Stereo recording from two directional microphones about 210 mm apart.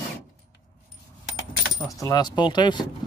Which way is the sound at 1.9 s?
15° left (ahead or behind).